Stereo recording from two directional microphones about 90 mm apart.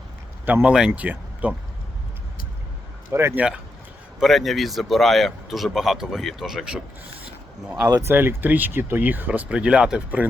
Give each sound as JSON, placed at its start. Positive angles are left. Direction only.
{"t": 0.4, "sound": "speech", "side_deg": -15}
{"t": 3.1, "sound": "speech", "side_deg": -30}
{"t": 3.3, "sound": "speech", "side_deg": -10}
{"t": 4.2, "sound": "speech", "side_deg": 0}
{"t": 8.0, "sound": "speech", "side_deg": -25}